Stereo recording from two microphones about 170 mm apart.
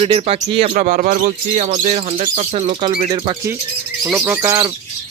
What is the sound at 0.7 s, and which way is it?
Speech, 50° right (ahead or behind).